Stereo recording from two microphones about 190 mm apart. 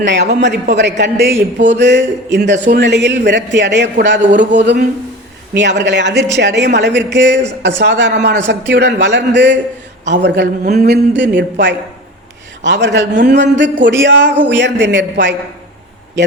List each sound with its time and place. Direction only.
0.0 s a man's voice: 65° right (ahead or behind)
4.2 s speech: 40° right (ahead or behind)
4.5 s a man's voice: 60° right (ahead or behind)